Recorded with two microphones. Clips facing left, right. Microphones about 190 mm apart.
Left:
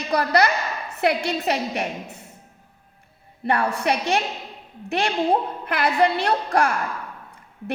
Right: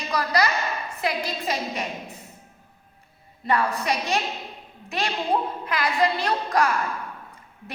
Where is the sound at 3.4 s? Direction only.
60° left (ahead or behind).